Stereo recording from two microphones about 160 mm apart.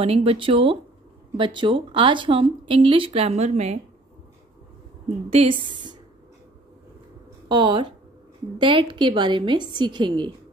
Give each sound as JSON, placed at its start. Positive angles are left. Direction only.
{"t": 0.0, "sound": "speech", "side_deg": -35}
{"t": 5.3, "sound": "speech", "side_deg": -35}
{"t": 7.4, "sound": "a woman's voice", "side_deg": -30}